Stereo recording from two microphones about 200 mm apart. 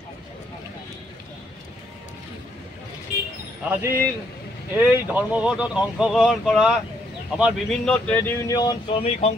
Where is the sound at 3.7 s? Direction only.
10° right (ahead or behind); by 9.1 s 20° left (ahead or behind).